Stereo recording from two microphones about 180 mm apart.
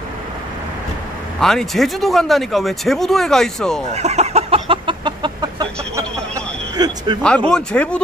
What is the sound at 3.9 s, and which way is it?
Chicken, 40° right (ahead or behind).